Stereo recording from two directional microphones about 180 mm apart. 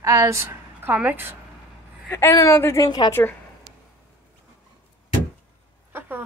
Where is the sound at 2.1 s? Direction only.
15° left (ahead or behind).